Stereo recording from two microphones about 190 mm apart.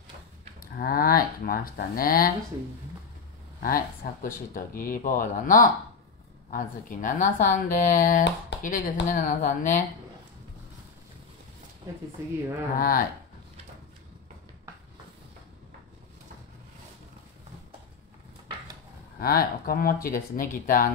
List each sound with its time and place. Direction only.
0.7 s speech: 50° left (ahead or behind)
3.6 s speech: 50° left (ahead or behind)
12.7 s speech: 45° left (ahead or behind)
19.1 s speech: 50° left (ahead or behind)